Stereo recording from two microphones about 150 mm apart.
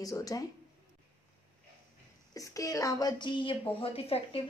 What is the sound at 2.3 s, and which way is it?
Speech, 20° left (ahead or behind).